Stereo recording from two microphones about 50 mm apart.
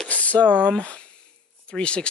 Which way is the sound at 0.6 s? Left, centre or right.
Left.